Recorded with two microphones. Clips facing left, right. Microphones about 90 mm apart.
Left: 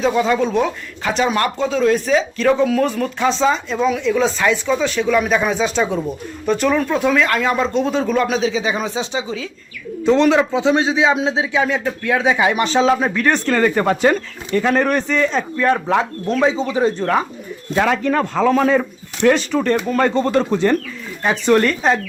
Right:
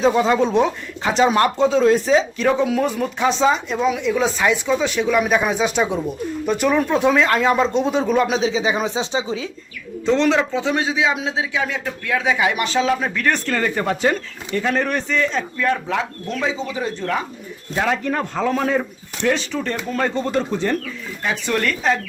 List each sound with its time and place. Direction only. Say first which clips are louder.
0.2 s speech: even; 25° right (ahead or behind)
10.0 s speech: left 3 dB; 5° left (ahead or behind)
10.6 s a man's voice: left 4 dB; 25° left (ahead or behind)
13.6 s speech: left 5 dB; 50° left (ahead or behind)
17.7 s a man's voice: left 4 dB; 90° left
19.2 s speech: left 6 dB; 60° left (ahead or behind)
21.2 s speech: left 7 dB; 35° left (ahead or behind)